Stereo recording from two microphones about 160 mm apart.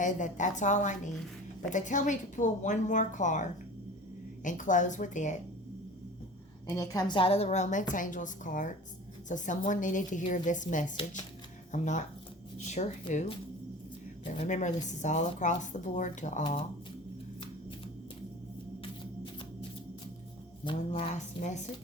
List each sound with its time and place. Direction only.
0.0 s speech: 50° left (ahead or behind)
6.7 s speech: 25° left (ahead or behind); by 13.3 s 45° left (ahead or behind)
14.3 s speech: 50° left (ahead or behind)
20.7 s speech: 30° left (ahead or behind)